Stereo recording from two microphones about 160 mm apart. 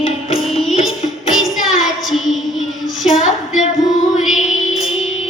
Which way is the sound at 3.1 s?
50° left (ahead or behind).